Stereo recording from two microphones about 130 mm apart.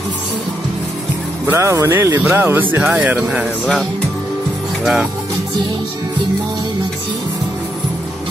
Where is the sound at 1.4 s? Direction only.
20° right (ahead or behind).